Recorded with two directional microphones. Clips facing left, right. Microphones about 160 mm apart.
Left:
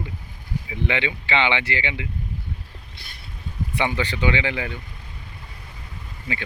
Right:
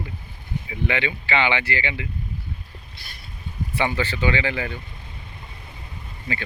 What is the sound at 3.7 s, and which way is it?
Speech, 20° left (ahead or behind).